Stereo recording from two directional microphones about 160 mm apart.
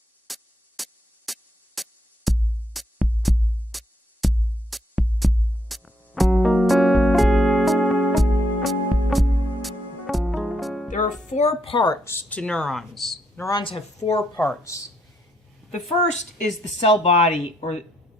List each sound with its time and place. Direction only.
0.3 s music: centre (ahead or behind)
0.8 s drum machine: centre (ahead or behind)
10.8 s music: 50° left (ahead or behind)
11.3 s speech: 45° left (ahead or behind)
12.0 s speech: 10° left (ahead or behind)
13.4 s speech: 25° left (ahead or behind)
14.3 s speech: 10° left (ahead or behind)
16.8 s speech: 35° left (ahead or behind)